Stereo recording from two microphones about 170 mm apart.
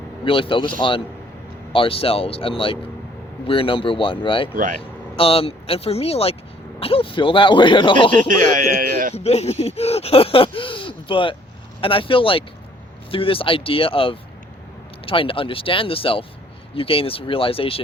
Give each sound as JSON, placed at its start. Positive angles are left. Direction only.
{"t": 0.3, "sound": "a man's voice", "side_deg": 30}
{"t": 8.3, "sound": "speech", "side_deg": -55}
{"t": 9.1, "sound": "speech", "side_deg": 40}